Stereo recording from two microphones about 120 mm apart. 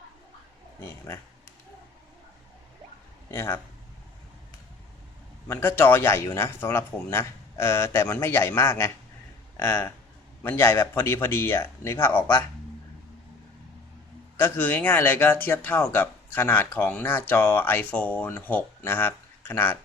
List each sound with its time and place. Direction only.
0.9 s speech: 20° left (ahead or behind)
3.3 s speech: 20° left (ahead or behind)
5.5 s speech: 20° left (ahead or behind)
14.3 s speech: 20° left (ahead or behind)